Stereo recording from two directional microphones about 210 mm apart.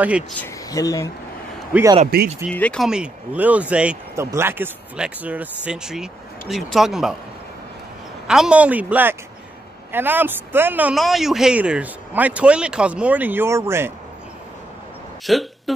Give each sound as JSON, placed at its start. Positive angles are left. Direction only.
{"t": 0.4, "sound": "speech", "side_deg": 15}
{"t": 1.7, "sound": "a man's voice", "side_deg": -10}
{"t": 2.5, "sound": "speech", "side_deg": 5}
{"t": 8.3, "sound": "speech", "side_deg": -5}
{"t": 15.2, "sound": "speech", "side_deg": 0}